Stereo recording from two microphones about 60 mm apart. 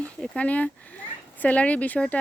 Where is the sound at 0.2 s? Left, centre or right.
Left.